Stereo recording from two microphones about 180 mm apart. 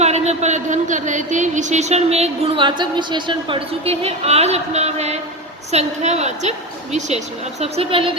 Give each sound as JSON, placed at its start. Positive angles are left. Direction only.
{"t": 0.0, "sound": "speech", "side_deg": -40}
{"t": 7.6, "sound": "speech", "side_deg": -30}